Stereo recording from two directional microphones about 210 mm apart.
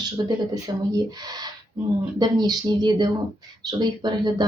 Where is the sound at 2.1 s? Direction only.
20° right (ahead or behind).